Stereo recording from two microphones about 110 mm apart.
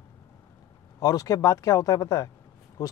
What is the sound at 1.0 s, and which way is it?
Speech, 35° left (ahead or behind).